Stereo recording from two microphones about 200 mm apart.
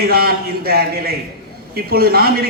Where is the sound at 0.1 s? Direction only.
50° right (ahead or behind).